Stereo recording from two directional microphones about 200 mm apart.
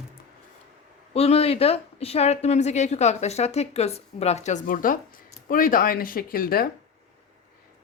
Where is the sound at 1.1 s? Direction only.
30° left (ahead or behind); by 6.6 s 45° left (ahead or behind).